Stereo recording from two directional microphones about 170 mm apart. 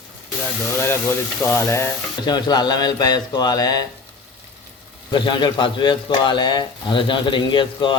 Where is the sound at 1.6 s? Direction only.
15° left (ahead or behind).